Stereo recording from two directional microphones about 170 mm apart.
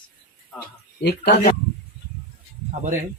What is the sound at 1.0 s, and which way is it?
Speech, 70° left (ahead or behind).